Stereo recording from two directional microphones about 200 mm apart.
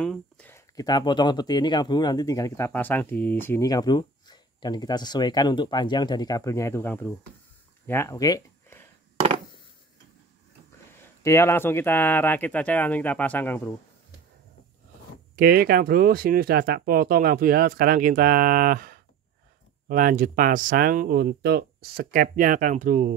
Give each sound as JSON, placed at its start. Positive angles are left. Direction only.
{"t": 0.0, "sound": "speech", "side_deg": 5}
{"t": 11.2, "sound": "speech", "side_deg": 15}
{"t": 15.3, "sound": "speech", "side_deg": -50}